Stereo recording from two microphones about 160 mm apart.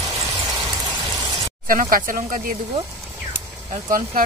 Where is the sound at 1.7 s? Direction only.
60° right (ahead or behind).